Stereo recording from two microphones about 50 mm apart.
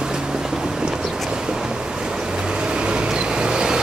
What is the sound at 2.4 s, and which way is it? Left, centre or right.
Vehicle, centre.